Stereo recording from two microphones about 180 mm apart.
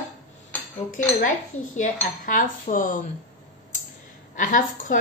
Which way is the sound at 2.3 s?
45° left (ahead or behind).